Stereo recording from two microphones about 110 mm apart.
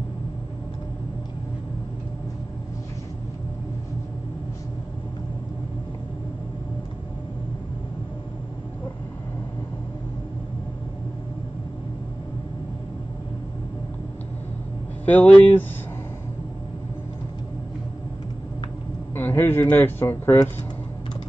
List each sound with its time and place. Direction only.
15.0 s speech: 15° left (ahead or behind)
19.1 s speech: 20° left (ahead or behind)